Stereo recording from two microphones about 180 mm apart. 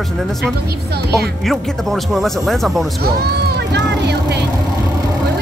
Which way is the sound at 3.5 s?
65° right (ahead or behind).